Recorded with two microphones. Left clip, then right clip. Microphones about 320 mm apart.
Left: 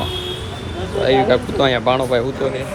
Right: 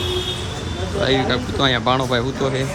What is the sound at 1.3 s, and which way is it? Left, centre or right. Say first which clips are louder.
Speech: left 4 dB; centre.